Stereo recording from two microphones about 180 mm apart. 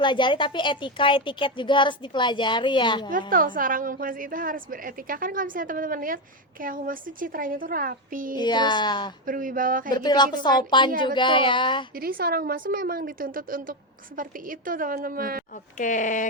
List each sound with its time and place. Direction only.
0.0 s speech: 25° left (ahead or behind)
3.1 s a woman's voice: 50° right (ahead or behind)
8.4 s speech: 25° left (ahead or behind)
9.2 s a woman's voice: 50° right (ahead or behind)
9.9 s speech: 25° left (ahead or behind)
11.9 s a woman's voice: 55° right (ahead or behind)
15.8 s speech: 45° left (ahead or behind)